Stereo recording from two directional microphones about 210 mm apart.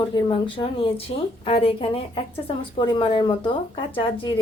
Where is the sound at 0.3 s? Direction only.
25° left (ahead or behind).